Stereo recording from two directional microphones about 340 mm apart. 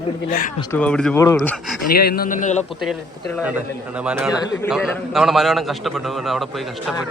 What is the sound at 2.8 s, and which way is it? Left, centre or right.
A man's voice, centre.